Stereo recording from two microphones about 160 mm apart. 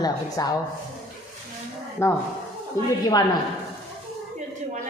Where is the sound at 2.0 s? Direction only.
15° left (ahead or behind).